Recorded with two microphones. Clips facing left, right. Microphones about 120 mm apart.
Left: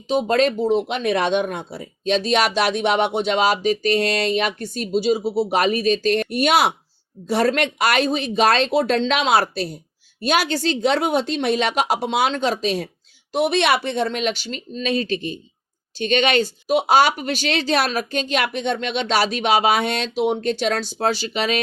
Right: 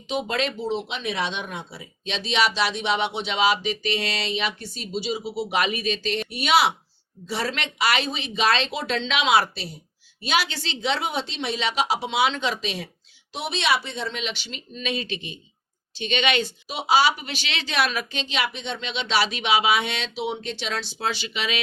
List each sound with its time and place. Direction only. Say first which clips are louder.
0.1 s speech: left 8 dB; 40° left (ahead or behind)